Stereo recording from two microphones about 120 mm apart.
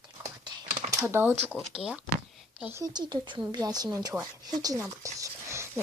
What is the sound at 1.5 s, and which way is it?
Speech, 5° right (ahead or behind).